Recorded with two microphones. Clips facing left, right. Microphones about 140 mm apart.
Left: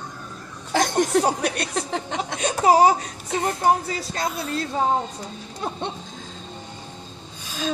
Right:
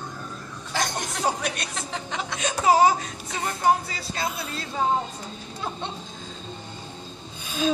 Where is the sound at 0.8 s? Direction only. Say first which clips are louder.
Left 8 dB; 40° left (ahead or behind).